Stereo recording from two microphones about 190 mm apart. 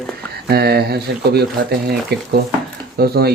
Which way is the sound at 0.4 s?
55° right (ahead or behind).